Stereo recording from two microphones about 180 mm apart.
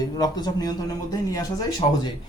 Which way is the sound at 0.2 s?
20° left (ahead or behind).